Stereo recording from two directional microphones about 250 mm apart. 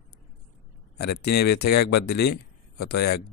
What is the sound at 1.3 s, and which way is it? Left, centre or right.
Speech, left.